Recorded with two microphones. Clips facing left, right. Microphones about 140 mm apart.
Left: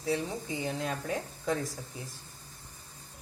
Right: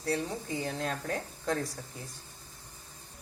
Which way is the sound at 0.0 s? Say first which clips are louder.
Left 1 dB; centre (ahead or behind).